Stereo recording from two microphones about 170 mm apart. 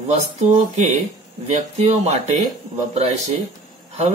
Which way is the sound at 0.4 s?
40° right (ahead or behind).